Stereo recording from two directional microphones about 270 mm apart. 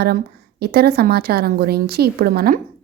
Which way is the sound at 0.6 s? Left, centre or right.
Right.